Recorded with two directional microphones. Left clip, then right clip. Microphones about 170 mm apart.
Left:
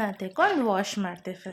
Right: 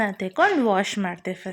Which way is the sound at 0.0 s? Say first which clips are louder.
Right 4 dB; 15° right (ahead or behind).